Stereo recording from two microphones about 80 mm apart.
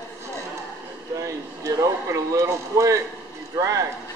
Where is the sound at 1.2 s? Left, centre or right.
Right.